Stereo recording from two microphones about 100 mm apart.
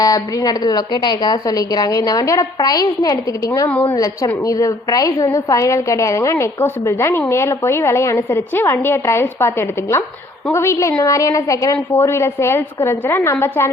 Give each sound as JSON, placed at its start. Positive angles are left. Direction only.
{"t": 0.0, "sound": "a woman's voice", "side_deg": 40}
{"t": 3.7, "sound": "a woman's voice", "side_deg": 15}
{"t": 3.9, "sound": "a woman's voice", "side_deg": 35}